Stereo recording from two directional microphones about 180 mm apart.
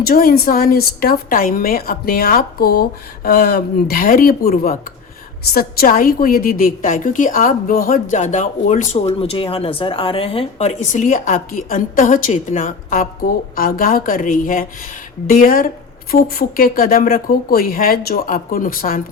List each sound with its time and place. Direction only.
0.0 s a woman's voice: 55° left (ahead or behind)